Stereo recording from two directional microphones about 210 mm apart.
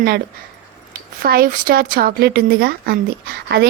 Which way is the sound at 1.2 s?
45° right (ahead or behind).